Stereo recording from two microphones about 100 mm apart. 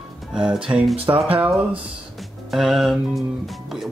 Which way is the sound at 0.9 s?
70° right (ahead or behind).